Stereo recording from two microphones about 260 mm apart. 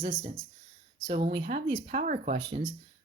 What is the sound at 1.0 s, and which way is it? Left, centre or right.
Speech, right.